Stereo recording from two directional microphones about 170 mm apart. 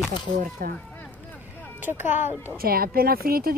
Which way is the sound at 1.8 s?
10° right (ahead or behind).